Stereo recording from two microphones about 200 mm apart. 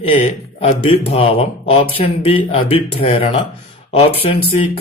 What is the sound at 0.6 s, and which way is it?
Speech, 30° left (ahead or behind).